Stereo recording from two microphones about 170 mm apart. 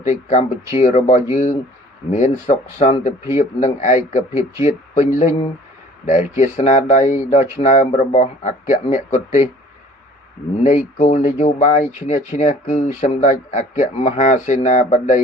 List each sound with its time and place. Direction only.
0.0 s speech: 45° left (ahead or behind)
10.6 s speech: 45° left (ahead or behind)